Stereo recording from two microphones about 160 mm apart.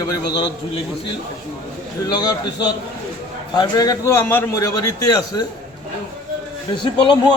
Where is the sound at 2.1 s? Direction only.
25° left (ahead or behind).